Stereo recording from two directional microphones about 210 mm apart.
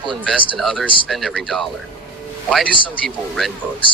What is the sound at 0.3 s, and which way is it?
Speech, 5° left (ahead or behind).